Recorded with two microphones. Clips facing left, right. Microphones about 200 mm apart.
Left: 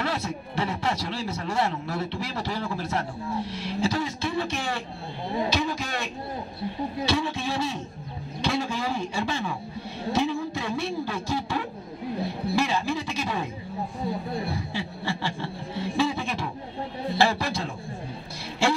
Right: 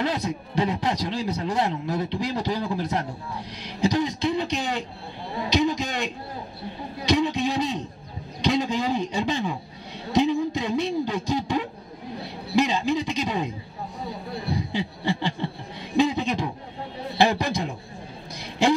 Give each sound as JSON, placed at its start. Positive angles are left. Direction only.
{"t": 0.0, "sound": "speech", "side_deg": -20}
{"t": 5.5, "sound": "a sound", "side_deg": -20}
{"t": 7.1, "sound": "speech", "side_deg": -20}
{"t": 14.5, "sound": "a man's voice", "side_deg": -20}
{"t": 18.6, "sound": "vehicle", "side_deg": -20}